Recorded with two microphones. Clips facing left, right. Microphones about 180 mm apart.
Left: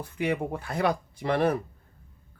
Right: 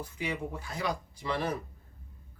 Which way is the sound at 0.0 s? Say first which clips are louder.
Left 7 dB; 60° left (ahead or behind).